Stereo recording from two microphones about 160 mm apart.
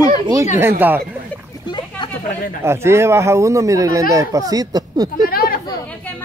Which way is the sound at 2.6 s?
15° right (ahead or behind).